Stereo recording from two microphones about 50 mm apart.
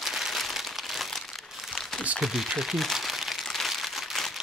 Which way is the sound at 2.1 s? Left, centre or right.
Centre.